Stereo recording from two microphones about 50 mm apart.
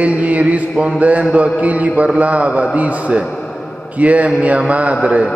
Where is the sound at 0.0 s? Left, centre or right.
Right.